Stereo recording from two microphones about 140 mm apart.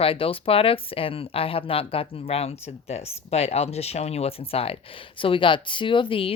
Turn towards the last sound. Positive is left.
turn(degrees=40)  # may be behind; listen again after turning